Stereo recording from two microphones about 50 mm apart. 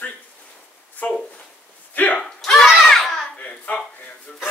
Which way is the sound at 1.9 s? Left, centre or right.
Left.